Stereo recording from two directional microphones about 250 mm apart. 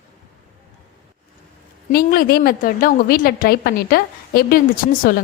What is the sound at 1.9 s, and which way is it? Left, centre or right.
A woman's voice, left.